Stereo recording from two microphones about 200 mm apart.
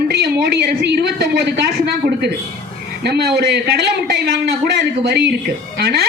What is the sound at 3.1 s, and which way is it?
A man's voice, 50° right (ahead or behind).